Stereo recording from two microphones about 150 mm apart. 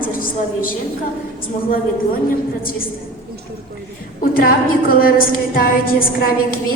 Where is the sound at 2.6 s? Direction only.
75° left (ahead or behind).